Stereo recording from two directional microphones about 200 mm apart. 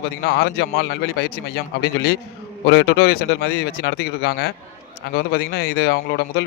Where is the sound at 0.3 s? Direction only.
55° left (ahead or behind).